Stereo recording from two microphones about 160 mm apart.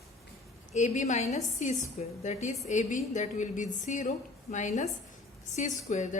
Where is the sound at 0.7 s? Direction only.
50° left (ahead or behind).